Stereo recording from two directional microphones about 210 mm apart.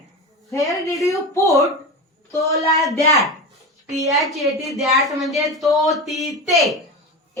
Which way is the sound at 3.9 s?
15° right (ahead or behind).